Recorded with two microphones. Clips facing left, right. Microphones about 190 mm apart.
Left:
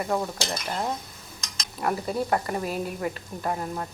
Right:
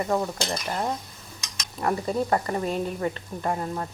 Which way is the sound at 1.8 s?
5° left (ahead or behind).